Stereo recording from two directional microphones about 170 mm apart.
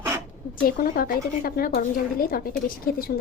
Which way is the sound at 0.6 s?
60° left (ahead or behind).